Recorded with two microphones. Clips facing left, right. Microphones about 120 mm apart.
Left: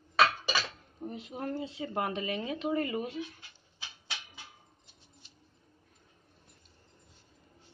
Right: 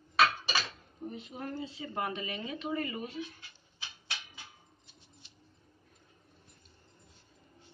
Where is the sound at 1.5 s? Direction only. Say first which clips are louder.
Left 5 dB; 65° left (ahead or behind).